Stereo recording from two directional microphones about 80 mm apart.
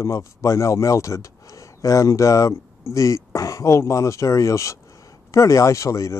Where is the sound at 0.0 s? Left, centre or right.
Left.